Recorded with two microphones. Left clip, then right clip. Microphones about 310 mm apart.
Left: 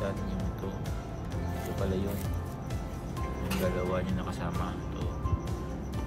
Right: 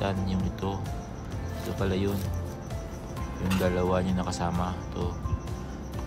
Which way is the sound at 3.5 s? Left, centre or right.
Centre.